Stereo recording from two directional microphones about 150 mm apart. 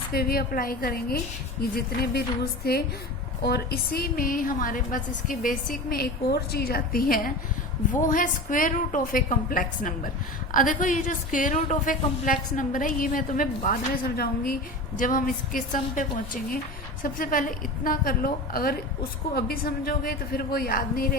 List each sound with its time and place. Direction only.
0.1 s a woman's voice: 90° left; by 7.3 s 75° left (ahead or behind)
7.9 s a woman's voice: 60° left (ahead or behind)
13.7 s a woman's voice: 80° left
14.9 s a woman's voice: 65° left (ahead or behind)
19.3 s a woman's voice: 90° left; by 21.2 s 75° left (ahead or behind)